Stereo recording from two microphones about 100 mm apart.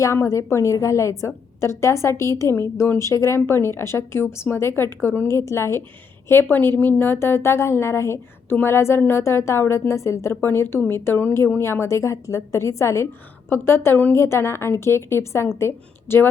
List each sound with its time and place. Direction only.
0.0 s a woman's voice: 30° left (ahead or behind)